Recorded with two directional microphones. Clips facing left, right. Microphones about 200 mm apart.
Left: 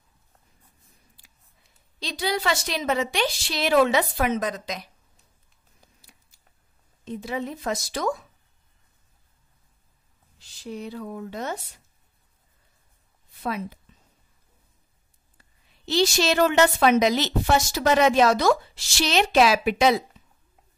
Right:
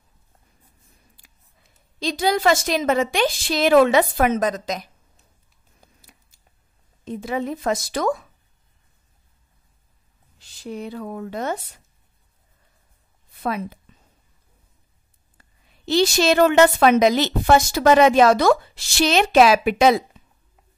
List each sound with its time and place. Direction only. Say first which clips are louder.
2.0 s a woman's voice: right 6 dB; 45° right (ahead or behind)
7.1 s a woman's voice: right 4 dB; 55° right (ahead or behind)
10.6 s a woman's voice: right 3 dB; 55° right (ahead or behind)
13.4 s speech: right 4 dB; 55° right (ahead or behind)
15.8 s a woman's voice: right 4 dB; 55° right (ahead or behind)